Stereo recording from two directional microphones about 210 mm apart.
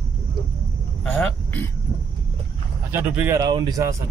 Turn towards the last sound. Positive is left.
turn(degrees=-15)  # may be behind; listen again after turning